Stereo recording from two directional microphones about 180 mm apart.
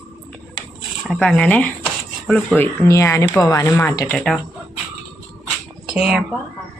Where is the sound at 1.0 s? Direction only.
Centre (ahead or behind).